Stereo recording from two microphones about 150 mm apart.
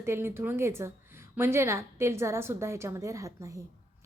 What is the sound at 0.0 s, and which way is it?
A woman's voice, 15° right (ahead or behind).